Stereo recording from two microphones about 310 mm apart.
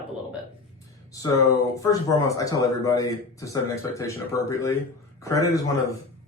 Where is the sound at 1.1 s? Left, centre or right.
Centre.